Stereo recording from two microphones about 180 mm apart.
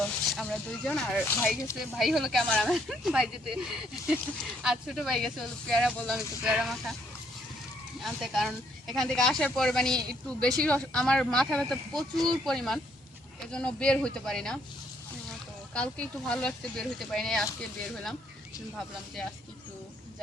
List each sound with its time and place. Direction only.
0.0 s speech: 5° left (ahead or behind)
1.3 s speech: 15° left (ahead or behind)
2.0 s speech: centre (ahead or behind)
8.0 s speech: centre (ahead or behind)
15.7 s speech: 5° left (ahead or behind)